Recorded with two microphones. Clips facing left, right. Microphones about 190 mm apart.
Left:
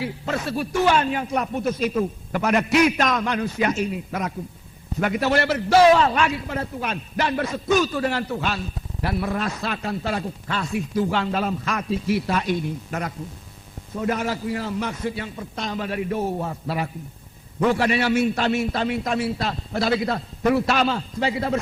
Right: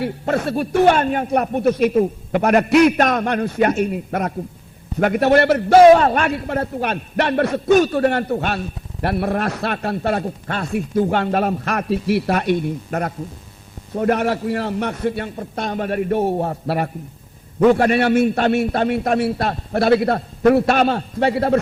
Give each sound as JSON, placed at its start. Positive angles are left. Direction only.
{"t": 0.0, "sound": "a man's voice", "side_deg": -55}